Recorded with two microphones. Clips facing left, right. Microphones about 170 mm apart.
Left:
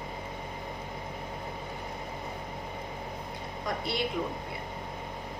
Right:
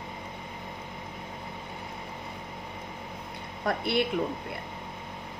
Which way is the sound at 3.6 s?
60° right (ahead or behind).